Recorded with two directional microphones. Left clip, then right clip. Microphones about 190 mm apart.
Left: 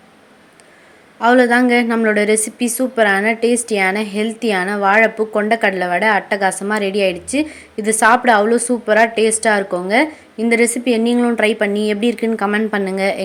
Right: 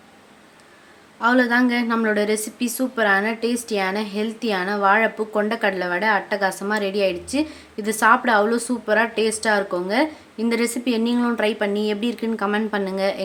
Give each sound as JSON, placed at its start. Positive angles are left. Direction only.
{"t": 1.2, "sound": "a woman's voice", "side_deg": 15}